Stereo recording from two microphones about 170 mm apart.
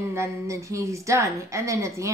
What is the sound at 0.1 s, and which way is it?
A woman's voice, 15° right (ahead or behind).